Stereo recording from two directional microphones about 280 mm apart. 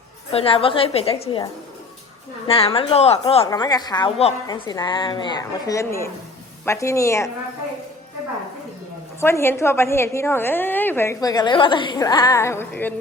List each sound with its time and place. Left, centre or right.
0.3 s a woman's voice: centre
2.5 s a woman's voice: centre
9.2 s a woman's voice: centre